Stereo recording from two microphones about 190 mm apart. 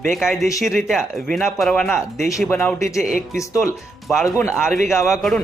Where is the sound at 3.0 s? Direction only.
40° right (ahead or behind).